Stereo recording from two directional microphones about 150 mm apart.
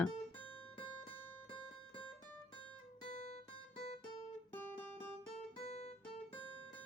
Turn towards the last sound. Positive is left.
turn(degrees=45)  # may be behind; listen again after turning